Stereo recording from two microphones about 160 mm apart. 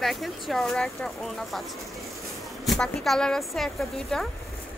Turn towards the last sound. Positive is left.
turn(degrees=0)  # may be behind; listen again after turning